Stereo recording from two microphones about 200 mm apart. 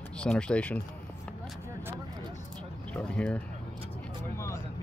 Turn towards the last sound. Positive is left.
turn(degrees=5)  # may be behind; listen again after turning